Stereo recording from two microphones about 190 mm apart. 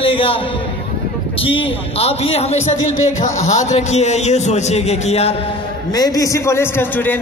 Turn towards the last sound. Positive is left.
turn(degrees=10)  # may be behind; listen again after turning